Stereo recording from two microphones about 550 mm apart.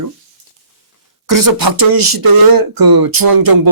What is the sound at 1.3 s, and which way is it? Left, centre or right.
Speech, right.